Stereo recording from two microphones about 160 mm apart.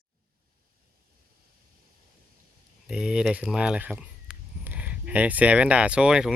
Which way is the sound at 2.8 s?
5° right (ahead or behind).